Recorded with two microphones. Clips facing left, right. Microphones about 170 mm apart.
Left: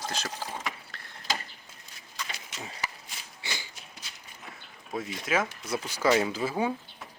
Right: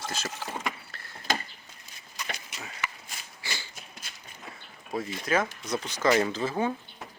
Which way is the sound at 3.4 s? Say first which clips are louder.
Even; 15° left (ahead or behind).